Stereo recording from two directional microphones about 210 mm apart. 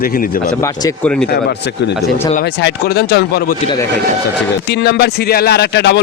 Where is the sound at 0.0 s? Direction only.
40° left (ahead or behind).